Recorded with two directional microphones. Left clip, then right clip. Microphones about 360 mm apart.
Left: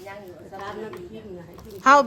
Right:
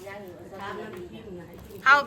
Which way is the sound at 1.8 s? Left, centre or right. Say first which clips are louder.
Left 4 dB; centre.